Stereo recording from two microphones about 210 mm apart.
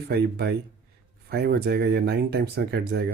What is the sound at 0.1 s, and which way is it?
Speech, 50° right (ahead or behind).